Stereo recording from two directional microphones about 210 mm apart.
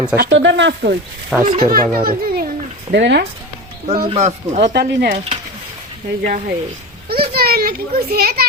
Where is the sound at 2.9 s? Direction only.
55° right (ahead or behind).